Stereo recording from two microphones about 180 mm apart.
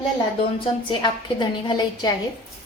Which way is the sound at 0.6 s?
25° left (ahead or behind).